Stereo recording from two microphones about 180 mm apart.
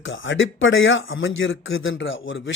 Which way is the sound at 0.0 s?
90° left.